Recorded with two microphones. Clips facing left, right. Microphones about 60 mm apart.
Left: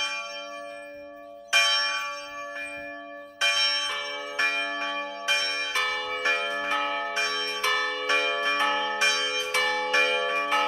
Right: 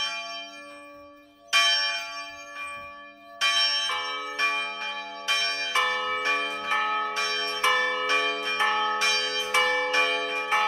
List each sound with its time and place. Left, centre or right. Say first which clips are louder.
1.5 s church bell: even; left
3.3 s church bell: even; left
5.7 s church bell: right 6 dB; right
6.2 s church bell: left 1 dB; centre
6.8 s church bell: right 2 dB; centre
7.2 s church bell: even; centre
7.6 s church bell: right 4 dB; right
8.1 s church bell: left 1 dB; left
9.5 s church bell: right 4 dB; centre
9.9 s church bell: left 2 dB; centre